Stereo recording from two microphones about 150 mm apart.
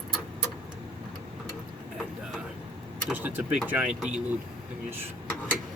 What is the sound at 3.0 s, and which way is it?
Vehicle, 10° right (ahead or behind).